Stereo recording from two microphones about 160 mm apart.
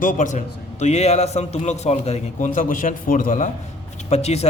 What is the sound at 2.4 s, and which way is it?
A man's voice, 55° left (ahead or behind).